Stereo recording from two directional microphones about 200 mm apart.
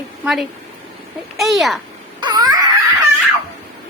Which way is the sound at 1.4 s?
Centre (ahead or behind).